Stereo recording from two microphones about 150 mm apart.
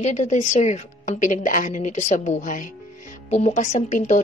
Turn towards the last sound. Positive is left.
turn(degrees=55)  # may be behind; listen again after turning